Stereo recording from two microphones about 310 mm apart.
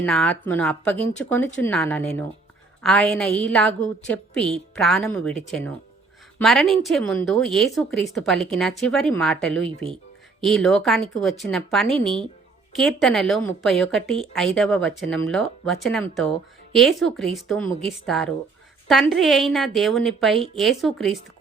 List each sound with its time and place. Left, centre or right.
0.0 s a woman's voice: centre
9.6 s speech: centre
10.4 s a woman's voice: centre